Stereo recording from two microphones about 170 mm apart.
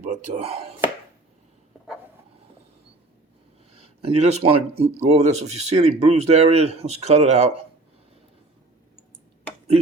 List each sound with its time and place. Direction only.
0.0 s speech: 40° right (ahead or behind)
3.7 s speech: 35° right (ahead or behind)